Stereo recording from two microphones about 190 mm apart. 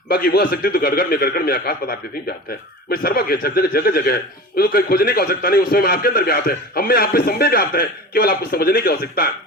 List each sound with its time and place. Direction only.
0.1 s a man's voice: 50° left (ahead or behind)